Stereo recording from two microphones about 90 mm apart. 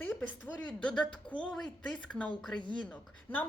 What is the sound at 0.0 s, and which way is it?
A woman's voice, 15° left (ahead or behind).